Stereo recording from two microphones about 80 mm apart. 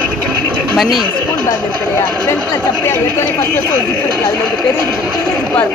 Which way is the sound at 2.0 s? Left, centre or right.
Left.